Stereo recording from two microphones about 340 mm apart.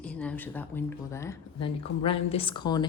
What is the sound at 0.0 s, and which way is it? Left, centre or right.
Speech, centre.